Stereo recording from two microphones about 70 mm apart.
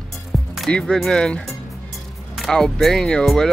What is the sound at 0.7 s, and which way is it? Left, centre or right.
Speech, centre.